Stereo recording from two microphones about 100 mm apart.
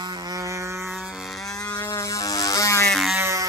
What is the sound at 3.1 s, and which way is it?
Music, 30° right (ahead or behind).